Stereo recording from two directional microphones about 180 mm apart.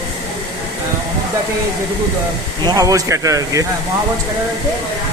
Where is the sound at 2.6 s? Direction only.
20° right (ahead or behind).